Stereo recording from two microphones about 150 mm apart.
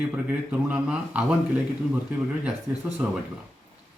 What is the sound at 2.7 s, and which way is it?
Speech, 10° right (ahead or behind).